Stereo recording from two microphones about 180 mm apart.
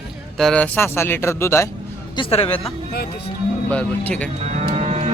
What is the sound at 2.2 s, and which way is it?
Speech, 30° left (ahead or behind).